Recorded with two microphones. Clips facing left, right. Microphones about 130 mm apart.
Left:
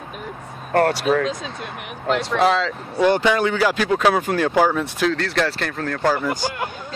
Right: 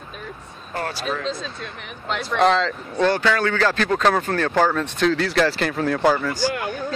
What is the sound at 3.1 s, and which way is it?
Speech, 20° left (ahead or behind).